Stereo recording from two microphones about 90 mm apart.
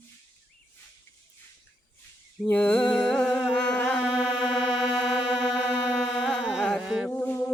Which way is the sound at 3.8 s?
5° right (ahead or behind).